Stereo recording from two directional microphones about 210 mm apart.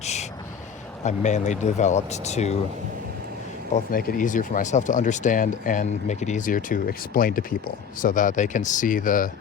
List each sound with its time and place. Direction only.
0.0 s a sound: 30° left (ahead or behind)
1.0 s speech: 35° left (ahead or behind)
3.9 s speech: 40° left (ahead or behind)